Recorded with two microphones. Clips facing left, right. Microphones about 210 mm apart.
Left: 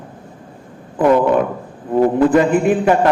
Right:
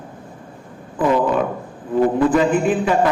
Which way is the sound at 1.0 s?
60° left (ahead or behind).